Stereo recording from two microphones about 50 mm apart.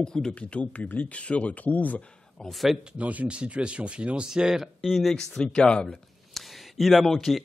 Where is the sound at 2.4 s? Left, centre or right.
Centre.